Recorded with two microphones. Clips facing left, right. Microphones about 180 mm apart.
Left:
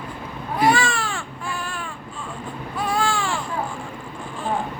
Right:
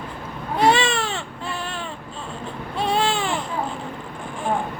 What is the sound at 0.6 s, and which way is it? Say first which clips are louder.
Baby cry: right 1 dB; 20° right (ahead or behind).